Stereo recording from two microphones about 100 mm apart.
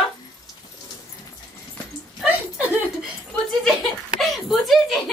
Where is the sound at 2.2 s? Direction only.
15° right (ahead or behind).